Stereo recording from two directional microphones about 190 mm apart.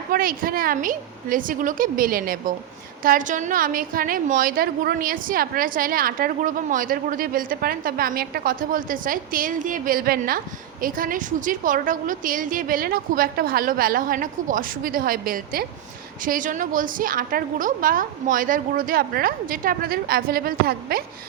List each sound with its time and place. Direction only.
0.1 s a woman's voice: 50° right (ahead or behind)